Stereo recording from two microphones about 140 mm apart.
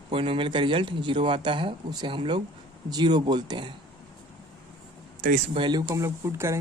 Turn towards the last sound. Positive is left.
turn(degrees=-20)  # may be behind; listen again after turning